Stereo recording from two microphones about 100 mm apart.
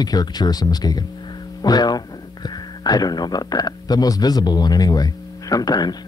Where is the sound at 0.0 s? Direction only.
40° left (ahead or behind).